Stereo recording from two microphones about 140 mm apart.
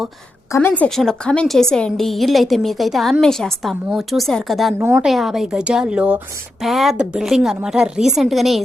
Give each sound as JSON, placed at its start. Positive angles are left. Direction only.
{"t": 0.5, "sound": "a woman's voice", "side_deg": 15}
{"t": 4.8, "sound": "a woman's voice", "side_deg": -20}
{"t": 5.0, "sound": "a woman's voice", "side_deg": 0}